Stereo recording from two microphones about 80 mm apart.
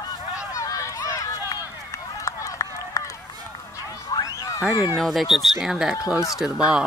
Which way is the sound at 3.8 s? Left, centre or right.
Left.